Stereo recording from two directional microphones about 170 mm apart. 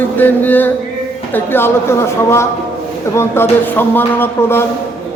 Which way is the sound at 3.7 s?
10° left (ahead or behind).